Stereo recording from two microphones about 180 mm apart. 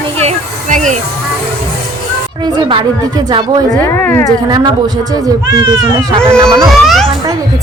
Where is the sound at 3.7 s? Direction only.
10° left (ahead or behind).